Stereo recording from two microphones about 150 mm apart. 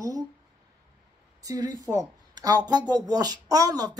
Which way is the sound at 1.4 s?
25° right (ahead or behind).